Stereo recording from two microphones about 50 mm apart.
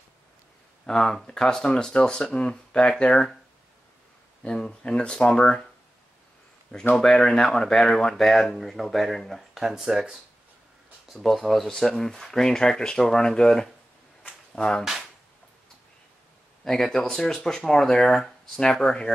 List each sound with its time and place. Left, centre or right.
0.8 s speech: centre
4.4 s speech: centre
7.0 s speech: centre
9.5 s speech: centre
11.2 s speech: centre
16.6 s speech: centre